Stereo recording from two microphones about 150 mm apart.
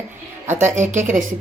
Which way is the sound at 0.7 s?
55° right (ahead or behind).